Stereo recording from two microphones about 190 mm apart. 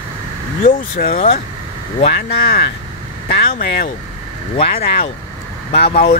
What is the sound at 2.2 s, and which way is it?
Speech, 55° left (ahead or behind).